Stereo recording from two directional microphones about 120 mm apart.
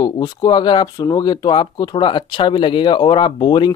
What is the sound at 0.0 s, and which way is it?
Speech, 30° left (ahead or behind).